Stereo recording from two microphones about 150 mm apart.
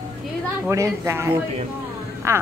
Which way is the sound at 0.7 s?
20° right (ahead or behind).